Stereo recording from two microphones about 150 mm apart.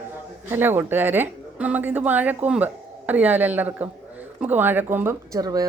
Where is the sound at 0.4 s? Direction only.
15° right (ahead or behind).